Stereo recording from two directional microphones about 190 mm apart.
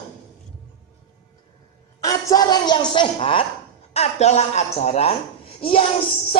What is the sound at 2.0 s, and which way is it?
A woman's voice, 20° left (ahead or behind).